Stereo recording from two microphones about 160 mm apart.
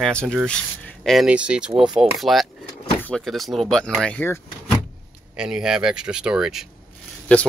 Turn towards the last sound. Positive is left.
turn(degrees=10)  # may be behind; listen again after turning